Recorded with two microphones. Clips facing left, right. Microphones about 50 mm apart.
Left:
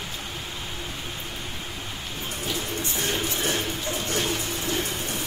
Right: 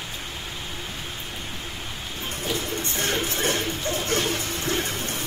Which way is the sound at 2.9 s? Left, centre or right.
Right.